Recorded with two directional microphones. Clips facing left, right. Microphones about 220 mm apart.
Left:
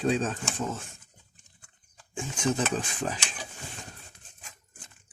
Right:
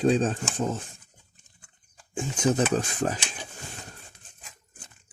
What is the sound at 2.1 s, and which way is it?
Speech, 40° right (ahead or behind).